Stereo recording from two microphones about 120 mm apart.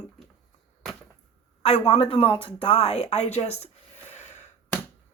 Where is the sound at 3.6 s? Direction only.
75° left (ahead or behind).